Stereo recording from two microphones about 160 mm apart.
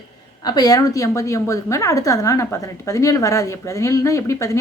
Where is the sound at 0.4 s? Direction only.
25° left (ahead or behind).